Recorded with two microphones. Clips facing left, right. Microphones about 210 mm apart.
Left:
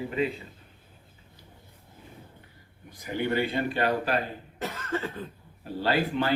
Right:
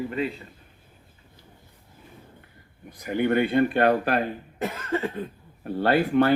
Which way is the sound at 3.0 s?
55° right (ahead or behind).